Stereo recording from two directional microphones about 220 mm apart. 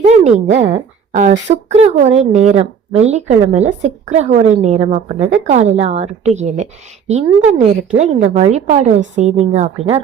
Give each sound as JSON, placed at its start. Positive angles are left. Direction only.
{"t": 0.0, "sound": "a woman's voice", "side_deg": -30}